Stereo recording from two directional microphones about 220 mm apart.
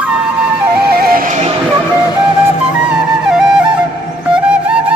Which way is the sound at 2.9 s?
5° right (ahead or behind).